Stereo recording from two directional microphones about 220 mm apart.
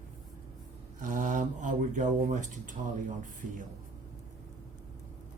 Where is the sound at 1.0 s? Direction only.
35° right (ahead or behind).